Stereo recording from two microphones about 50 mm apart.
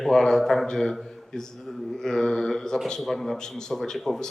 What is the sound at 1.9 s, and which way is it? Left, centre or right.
A man's voice, centre.